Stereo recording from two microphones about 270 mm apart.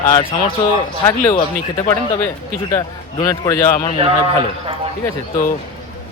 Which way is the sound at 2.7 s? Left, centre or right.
Centre.